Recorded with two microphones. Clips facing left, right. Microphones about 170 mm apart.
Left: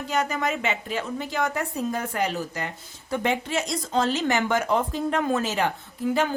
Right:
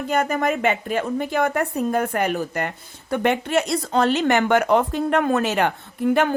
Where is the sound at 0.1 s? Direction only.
55° right (ahead or behind).